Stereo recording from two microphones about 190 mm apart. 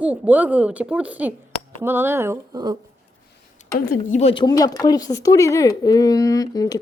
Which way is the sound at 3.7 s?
45° left (ahead or behind).